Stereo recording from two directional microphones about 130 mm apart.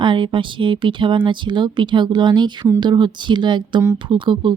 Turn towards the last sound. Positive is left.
turn(degrees=-40)  # may be behind; listen again after turning